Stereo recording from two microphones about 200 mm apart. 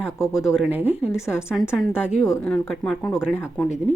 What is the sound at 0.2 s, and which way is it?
Speech, 15° left (ahead or behind).